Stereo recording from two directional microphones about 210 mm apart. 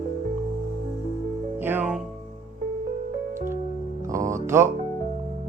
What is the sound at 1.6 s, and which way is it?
Music, 10° right (ahead or behind).